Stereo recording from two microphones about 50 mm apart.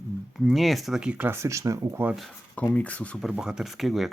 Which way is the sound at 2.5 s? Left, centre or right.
Left.